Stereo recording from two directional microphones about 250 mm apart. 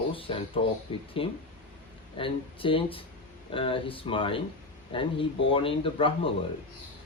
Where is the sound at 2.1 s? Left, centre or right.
Left.